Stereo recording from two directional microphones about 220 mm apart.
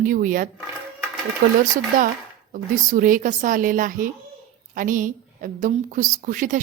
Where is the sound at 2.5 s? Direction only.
40° right (ahead or behind).